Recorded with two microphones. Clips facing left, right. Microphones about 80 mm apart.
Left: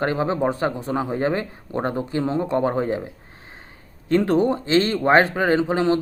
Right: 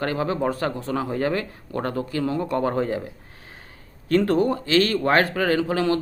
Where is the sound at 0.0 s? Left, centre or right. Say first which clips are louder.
Left 2 dB; left.